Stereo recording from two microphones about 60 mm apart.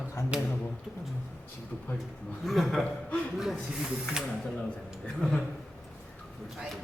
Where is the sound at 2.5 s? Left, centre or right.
Centre.